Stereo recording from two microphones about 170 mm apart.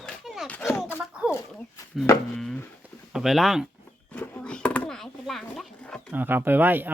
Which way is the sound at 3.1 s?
Centre (ahead or behind).